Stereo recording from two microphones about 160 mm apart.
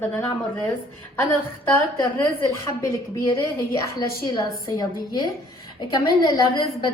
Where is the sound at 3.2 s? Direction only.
20° left (ahead or behind).